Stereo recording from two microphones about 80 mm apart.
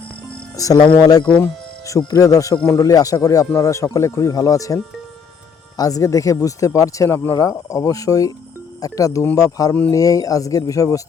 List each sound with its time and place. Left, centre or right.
0.5 s speech: left